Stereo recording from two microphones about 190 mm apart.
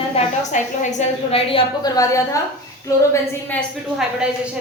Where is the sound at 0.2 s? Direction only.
40° left (ahead or behind); by 2.4 s 15° left (ahead or behind).